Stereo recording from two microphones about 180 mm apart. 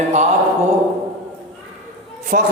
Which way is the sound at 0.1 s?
40° right (ahead or behind).